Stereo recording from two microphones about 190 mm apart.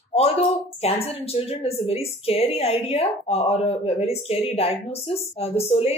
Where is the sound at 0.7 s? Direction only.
30° left (ahead or behind).